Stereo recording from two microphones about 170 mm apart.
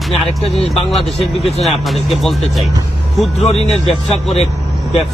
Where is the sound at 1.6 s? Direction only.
Centre (ahead or behind).